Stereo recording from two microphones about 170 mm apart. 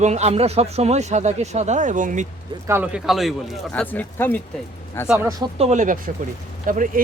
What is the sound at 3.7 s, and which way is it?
Speech, 10° left (ahead or behind).